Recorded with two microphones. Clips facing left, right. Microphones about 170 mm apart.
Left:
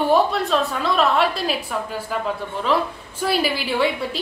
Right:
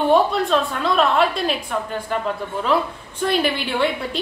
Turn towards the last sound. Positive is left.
turn(degrees=0)  # may be behind; listen again after turning